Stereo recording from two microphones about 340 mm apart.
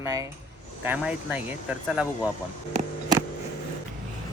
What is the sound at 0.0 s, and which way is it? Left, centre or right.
Speech, centre.